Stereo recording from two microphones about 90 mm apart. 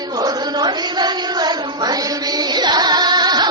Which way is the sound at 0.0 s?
45° right (ahead or behind).